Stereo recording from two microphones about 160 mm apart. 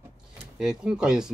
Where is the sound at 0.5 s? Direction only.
5° right (ahead or behind).